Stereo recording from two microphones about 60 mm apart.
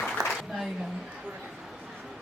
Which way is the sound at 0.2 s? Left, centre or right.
Right.